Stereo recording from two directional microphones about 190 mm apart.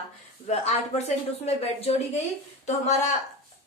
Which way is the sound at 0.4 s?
35° left (ahead or behind).